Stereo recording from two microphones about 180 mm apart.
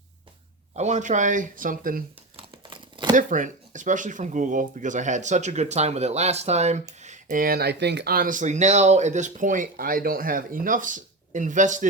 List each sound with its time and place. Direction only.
0.8 s speech: 40° right (ahead or behind)
2.3 s tearing: 25° right (ahead or behind)
3.2 s speech: 45° right (ahead or behind)